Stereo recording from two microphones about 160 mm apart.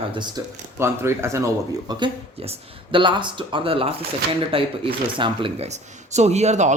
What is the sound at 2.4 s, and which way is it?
Speech, 35° right (ahead or behind).